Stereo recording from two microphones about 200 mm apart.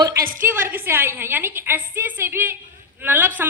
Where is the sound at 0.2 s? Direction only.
45° right (ahead or behind).